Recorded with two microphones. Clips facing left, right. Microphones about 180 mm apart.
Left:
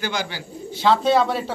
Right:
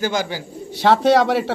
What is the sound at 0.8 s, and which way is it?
Speech, 75° right (ahead or behind).